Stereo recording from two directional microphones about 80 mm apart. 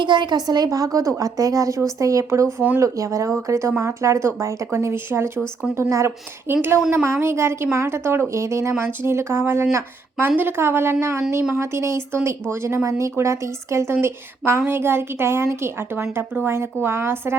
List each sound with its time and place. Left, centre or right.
0.0 s a woman's voice: right
5.7 s speech: centre
6.1 s speech: right